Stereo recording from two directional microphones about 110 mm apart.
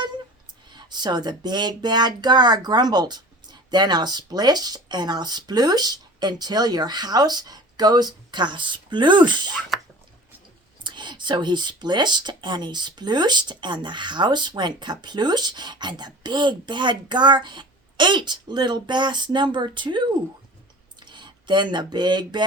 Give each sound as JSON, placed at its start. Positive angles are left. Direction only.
{"t": 0.7, "sound": "speech", "side_deg": -40}
{"t": 9.7, "sound": "whispering", "side_deg": 0}
{"t": 10.8, "sound": "speech", "side_deg": -45}